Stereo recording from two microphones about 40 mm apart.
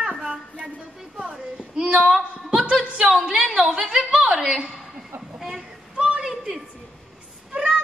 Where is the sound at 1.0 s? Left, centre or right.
Centre.